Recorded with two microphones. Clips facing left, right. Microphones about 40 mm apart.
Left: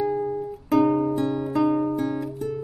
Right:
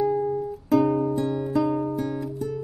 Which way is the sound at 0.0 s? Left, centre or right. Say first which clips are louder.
Right 1 dB; centre.